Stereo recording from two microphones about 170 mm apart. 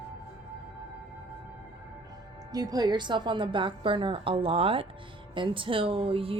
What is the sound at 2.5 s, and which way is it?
A woman's voice, 20° right (ahead or behind).